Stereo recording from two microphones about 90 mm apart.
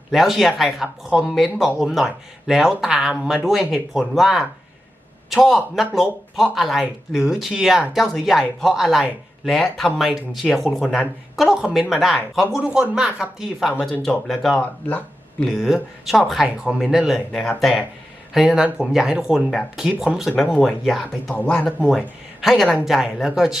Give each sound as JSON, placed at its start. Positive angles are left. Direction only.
{"t": 0.1, "sound": "speech", "side_deg": 0}
{"t": 14.5, "sound": "speech", "side_deg": 15}
{"t": 15.5, "sound": "speech", "side_deg": 0}
{"t": 18.3, "sound": "speech", "side_deg": -5}
{"t": 20.4, "sound": "speech", "side_deg": 5}
{"t": 21.3, "sound": "speech", "side_deg": 15}
{"t": 21.8, "sound": "speech", "side_deg": 0}